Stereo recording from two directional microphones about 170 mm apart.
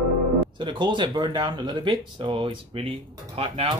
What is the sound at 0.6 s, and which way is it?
Speech, 25° right (ahead or behind).